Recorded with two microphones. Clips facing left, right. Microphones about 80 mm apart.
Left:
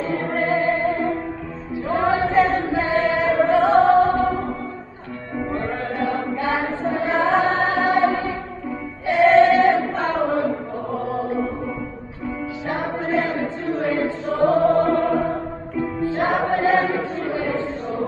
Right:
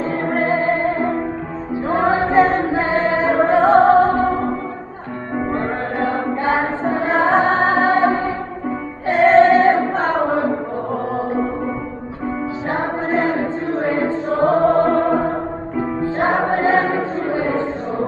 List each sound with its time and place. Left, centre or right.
0.1 s music: right
5.5 s music: right
9.0 s choir: right
10.0 s a sound: right
12.6 s choir: right
14.7 s music: right
16.4 s choir: right
17.3 s a sound: right